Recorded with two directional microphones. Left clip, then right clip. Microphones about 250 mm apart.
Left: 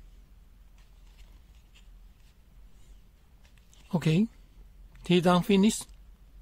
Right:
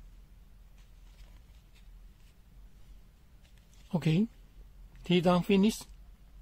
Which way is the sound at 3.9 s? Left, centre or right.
Left.